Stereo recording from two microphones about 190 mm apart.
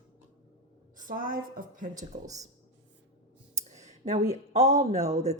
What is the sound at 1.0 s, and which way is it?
Speech, 45° right (ahead or behind).